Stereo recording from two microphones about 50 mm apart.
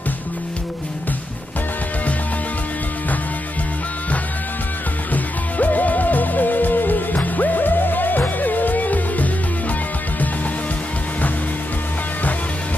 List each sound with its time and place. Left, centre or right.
5.1 s music: left